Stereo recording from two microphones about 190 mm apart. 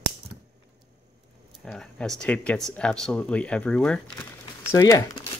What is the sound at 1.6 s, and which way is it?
Speech, 5° left (ahead or behind).